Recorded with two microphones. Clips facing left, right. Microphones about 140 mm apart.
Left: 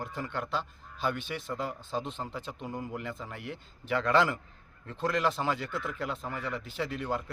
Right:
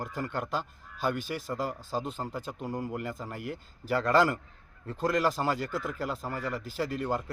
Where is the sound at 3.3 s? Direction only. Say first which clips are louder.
Right 3 dB; 5° right (ahead or behind).